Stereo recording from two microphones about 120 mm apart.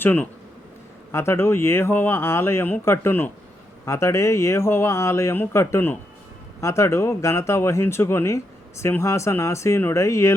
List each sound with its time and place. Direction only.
0.0 s speech: 15° left (ahead or behind)